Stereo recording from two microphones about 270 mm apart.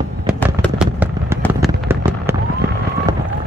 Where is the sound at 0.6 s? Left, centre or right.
Centre.